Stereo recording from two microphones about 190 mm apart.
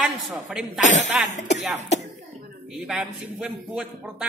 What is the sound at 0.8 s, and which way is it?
Speech, 40° left (ahead or behind).